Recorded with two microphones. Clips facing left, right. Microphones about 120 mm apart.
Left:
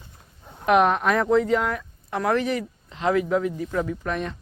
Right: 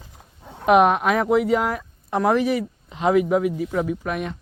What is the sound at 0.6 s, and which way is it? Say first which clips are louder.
Speech: right 3 dB; 15° right (ahead or behind).